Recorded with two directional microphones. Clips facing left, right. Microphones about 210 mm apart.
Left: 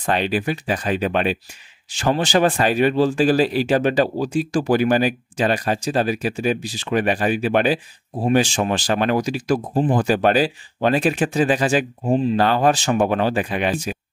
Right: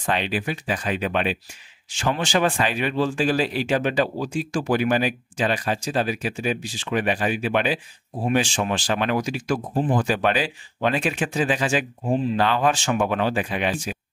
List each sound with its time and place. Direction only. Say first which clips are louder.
0.0 s speech: left 4 dB; 40° left (ahead or behind)